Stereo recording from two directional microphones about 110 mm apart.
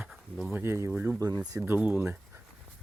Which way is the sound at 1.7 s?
15° right (ahead or behind).